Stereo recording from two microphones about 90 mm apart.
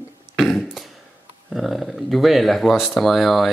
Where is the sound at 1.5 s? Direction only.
Centre (ahead or behind).